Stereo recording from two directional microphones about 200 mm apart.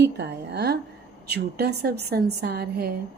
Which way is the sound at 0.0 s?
55° right (ahead or behind).